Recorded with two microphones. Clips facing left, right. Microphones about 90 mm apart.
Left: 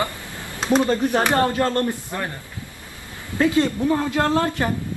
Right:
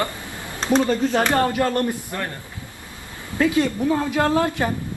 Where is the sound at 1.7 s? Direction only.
20° right (ahead or behind).